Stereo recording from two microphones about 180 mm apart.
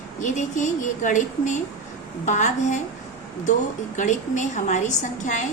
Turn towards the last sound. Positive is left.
turn(degrees=45)  # may be behind; listen again after turning